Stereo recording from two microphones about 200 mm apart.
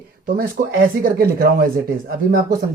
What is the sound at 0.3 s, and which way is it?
Speech, 45° right (ahead or behind).